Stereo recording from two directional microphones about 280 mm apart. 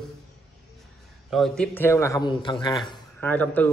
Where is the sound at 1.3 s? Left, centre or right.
Centre.